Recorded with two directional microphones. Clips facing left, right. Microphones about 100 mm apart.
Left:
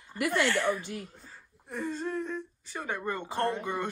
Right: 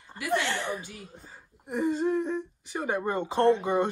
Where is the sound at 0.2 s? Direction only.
25° right (ahead or behind).